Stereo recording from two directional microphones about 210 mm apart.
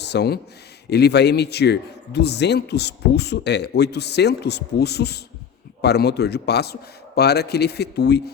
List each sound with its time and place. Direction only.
0.0 s a man's voice: 55° left (ahead or behind)